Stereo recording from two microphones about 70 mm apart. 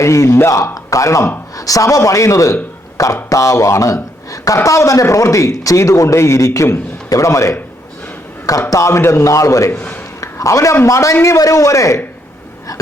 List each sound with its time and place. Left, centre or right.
0.0 s a man's voice: left
8.7 s a man's voice: left
9.7 s a man's voice: left
10.2 s a sound: left
10.8 s a man's voice: left
11.3 s a man's voice: left